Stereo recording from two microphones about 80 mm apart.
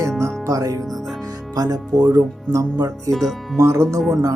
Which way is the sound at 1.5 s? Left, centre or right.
Right.